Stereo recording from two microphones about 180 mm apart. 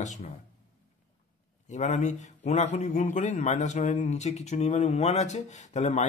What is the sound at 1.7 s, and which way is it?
A man's voice, 40° left (ahead or behind).